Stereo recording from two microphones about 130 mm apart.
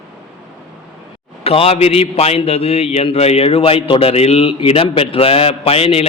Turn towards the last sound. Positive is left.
turn(degrees=50)  # may be behind; listen again after turning